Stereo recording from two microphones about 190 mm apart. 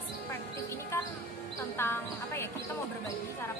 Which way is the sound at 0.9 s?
15° left (ahead or behind).